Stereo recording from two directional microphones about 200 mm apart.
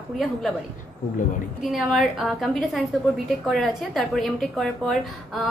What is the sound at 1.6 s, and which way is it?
A woman's voice, centre (ahead or behind).